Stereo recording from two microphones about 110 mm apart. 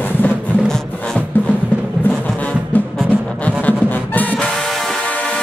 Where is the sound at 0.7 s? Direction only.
5° left (ahead or behind).